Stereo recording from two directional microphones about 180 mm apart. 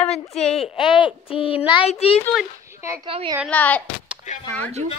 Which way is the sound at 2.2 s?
Centre (ahead or behind).